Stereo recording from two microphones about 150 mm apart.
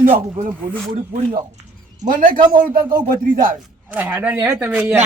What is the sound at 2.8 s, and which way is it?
Speech, 30° right (ahead or behind).